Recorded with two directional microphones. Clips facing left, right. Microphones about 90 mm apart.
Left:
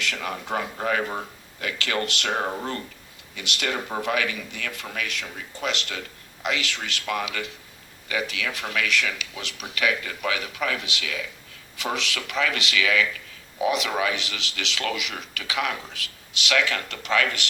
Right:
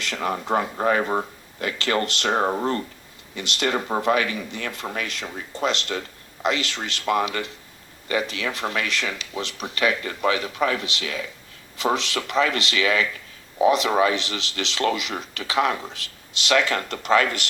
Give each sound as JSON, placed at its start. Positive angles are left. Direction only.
{"t": 0.0, "sound": "speech", "side_deg": -35}